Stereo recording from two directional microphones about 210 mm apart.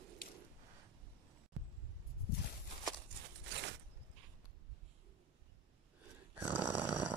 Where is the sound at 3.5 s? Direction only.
55° right (ahead or behind).